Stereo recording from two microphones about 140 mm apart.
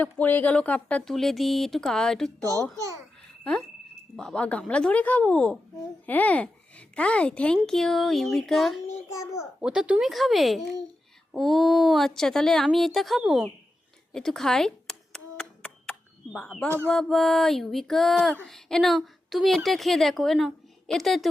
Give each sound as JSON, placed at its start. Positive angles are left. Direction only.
{"t": 0.0, "sound": "a woman's voice", "side_deg": 10}
{"t": 2.4, "sound": "a child's voice", "side_deg": -25}
{"t": 3.4, "sound": "a woman's voice", "side_deg": 10}
{"t": 9.1, "sound": "a child's voice", "side_deg": 20}
{"t": 9.6, "sound": "a woman's voice", "side_deg": -5}